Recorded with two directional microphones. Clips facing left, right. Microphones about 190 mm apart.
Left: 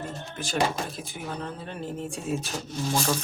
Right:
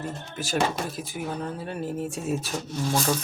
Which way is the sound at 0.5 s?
5° right (ahead or behind).